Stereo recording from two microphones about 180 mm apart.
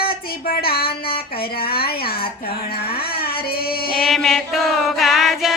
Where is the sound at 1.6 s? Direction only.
60° left (ahead or behind).